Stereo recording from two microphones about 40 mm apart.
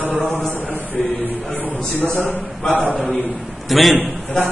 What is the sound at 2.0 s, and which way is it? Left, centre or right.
Speech, left.